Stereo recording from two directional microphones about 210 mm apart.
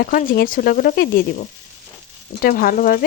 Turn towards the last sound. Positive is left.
turn(degrees=40)  # may be behind; listen again after turning